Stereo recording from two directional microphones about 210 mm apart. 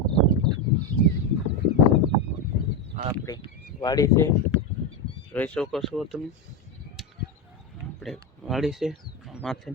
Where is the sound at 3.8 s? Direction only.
15° left (ahead or behind).